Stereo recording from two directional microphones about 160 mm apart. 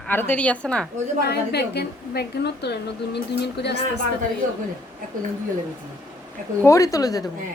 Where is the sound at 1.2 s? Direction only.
90° left.